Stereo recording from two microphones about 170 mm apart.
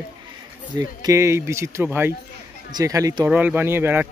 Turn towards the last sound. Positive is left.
turn(degrees=-15)  # may be behind; listen again after turning